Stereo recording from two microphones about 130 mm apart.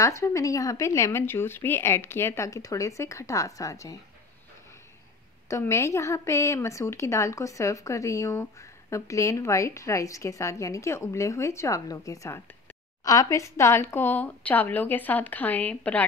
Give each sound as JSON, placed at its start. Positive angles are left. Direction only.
{"t": 0.0, "sound": "a woman's voice", "side_deg": 25}
{"t": 5.5, "sound": "a woman's voice", "side_deg": 20}